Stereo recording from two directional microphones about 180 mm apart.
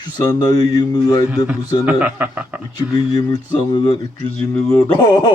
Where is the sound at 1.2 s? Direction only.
10° right (ahead or behind).